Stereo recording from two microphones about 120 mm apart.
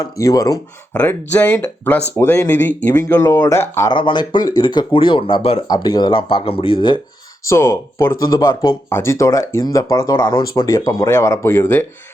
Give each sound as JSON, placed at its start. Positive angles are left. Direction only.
{"t": 0.0, "sound": "speech", "side_deg": 30}
{"t": 0.9, "sound": "speech", "side_deg": 15}
{"t": 3.9, "sound": "speech", "side_deg": 40}
{"t": 5.6, "sound": "speech", "side_deg": 35}
{"t": 7.4, "sound": "speech", "side_deg": 25}